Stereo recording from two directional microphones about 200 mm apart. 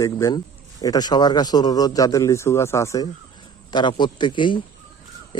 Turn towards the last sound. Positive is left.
turn(degrees=25)  # may be behind; listen again after turning